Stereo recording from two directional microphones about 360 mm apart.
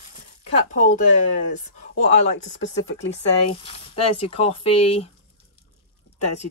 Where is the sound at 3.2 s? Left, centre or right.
Centre.